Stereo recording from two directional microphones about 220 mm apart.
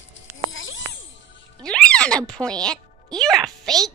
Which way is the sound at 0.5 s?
60° left (ahead or behind).